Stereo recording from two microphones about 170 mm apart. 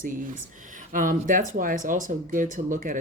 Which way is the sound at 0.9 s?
55° right (ahead or behind).